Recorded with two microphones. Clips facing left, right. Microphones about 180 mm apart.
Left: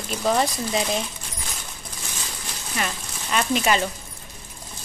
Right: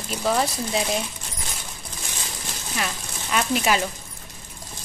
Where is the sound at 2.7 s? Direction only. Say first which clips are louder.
Left 1 dB; centre (ahead or behind).